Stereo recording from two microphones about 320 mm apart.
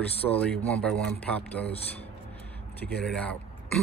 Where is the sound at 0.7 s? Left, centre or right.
Centre.